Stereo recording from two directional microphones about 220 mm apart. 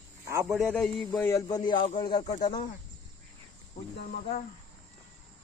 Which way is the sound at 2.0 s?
20° left (ahead or behind).